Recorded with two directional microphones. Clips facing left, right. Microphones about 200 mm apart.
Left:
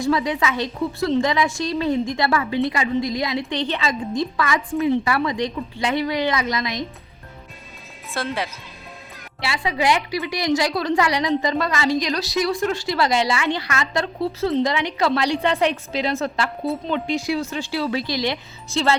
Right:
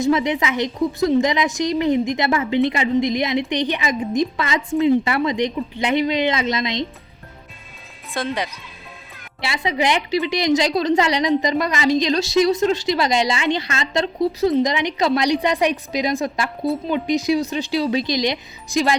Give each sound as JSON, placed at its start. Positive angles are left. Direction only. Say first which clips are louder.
{"t": 0.0, "sound": "a woman's voice", "louder": "right 2 dB", "side_deg": -20}
{"t": 8.1, "sound": "speech", "louder": "right 2 dB", "side_deg": 0}
{"t": 9.4, "sound": "a woman's voice", "louder": "right 1 dB", "side_deg": -20}